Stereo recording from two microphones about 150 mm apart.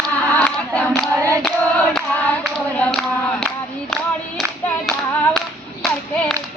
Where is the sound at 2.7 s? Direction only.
5° left (ahead or behind).